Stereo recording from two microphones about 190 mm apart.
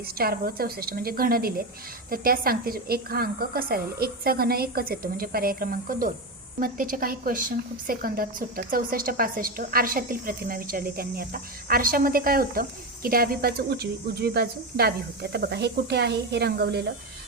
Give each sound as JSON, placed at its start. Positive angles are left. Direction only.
{"t": 0.0, "sound": "a woman's voice", "side_deg": -55}